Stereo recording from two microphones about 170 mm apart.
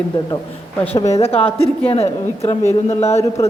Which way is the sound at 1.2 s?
35° left (ahead or behind).